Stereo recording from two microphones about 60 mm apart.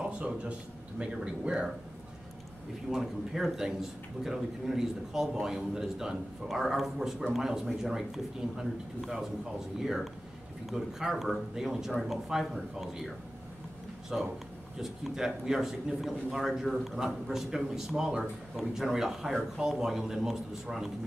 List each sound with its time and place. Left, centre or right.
0.0 s speech: centre
2.9 s a man's voice: centre
14.1 s a man's voice: centre